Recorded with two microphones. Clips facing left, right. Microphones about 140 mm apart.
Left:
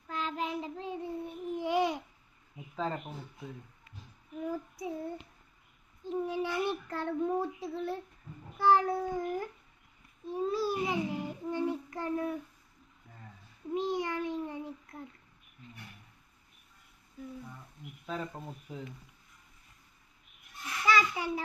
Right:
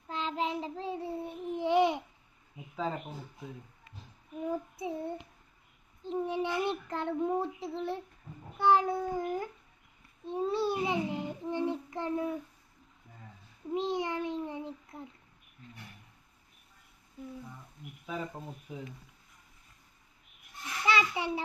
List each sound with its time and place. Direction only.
0.1 s child singing: 25° right (ahead or behind)
2.7 s speech: 5° right (ahead or behind)
4.4 s child singing: 25° right (ahead or behind)
7.6 s a child's voice: 25° right (ahead or behind)
10.2 s babbling: 25° right (ahead or behind)
13.7 s a child's voice: 25° right (ahead or behind)
18.0 s speech: 5° right (ahead or behind)
20.8 s a child's voice: 25° right (ahead or behind)